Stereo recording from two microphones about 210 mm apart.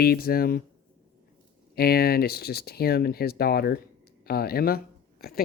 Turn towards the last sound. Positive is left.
turn(degrees=45)  # may be behind; listen again after turning